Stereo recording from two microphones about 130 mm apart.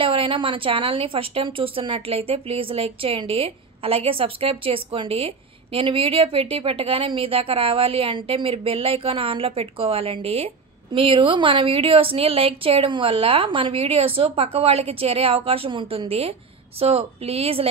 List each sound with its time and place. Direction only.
0.0 s a woman's voice: 40° right (ahead or behind)